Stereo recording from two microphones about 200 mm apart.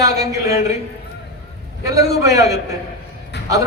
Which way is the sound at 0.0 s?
15° right (ahead or behind).